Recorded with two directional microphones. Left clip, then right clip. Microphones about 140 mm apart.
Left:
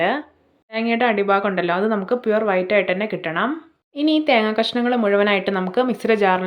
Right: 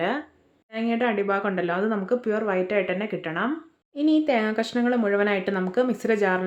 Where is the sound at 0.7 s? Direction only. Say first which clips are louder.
Left 6 dB; 15° left (ahead or behind).